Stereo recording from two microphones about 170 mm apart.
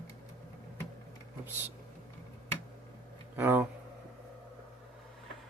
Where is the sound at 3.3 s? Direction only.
15° right (ahead or behind).